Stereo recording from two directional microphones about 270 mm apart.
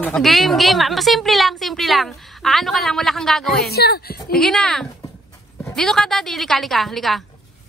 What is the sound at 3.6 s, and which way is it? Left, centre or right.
Speech, left.